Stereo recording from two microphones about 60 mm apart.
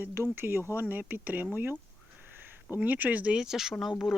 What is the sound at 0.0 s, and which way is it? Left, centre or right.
Speech, right.